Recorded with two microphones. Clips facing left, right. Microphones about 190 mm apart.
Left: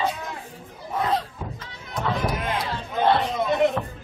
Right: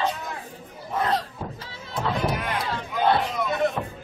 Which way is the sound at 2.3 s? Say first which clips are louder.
Left 1 dB; 25° left (ahead or behind).